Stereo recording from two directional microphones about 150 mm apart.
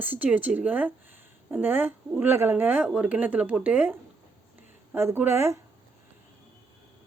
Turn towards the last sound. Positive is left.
turn(degrees=-15)  # may be behind; listen again after turning